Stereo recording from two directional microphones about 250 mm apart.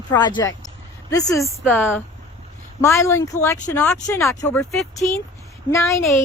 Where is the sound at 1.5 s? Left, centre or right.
Centre.